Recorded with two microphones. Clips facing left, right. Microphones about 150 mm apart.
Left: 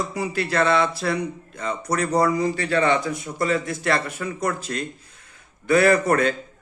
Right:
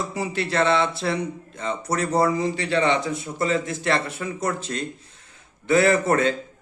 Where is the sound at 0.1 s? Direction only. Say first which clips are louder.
Left 1 dB; 25° right (ahead or behind).